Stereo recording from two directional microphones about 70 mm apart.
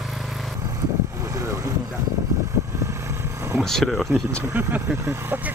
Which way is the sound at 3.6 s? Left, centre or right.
Centre.